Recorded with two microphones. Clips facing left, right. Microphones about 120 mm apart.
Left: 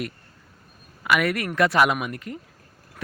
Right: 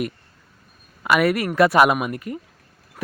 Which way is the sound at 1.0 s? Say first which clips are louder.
Right 4 dB; 30° right (ahead or behind).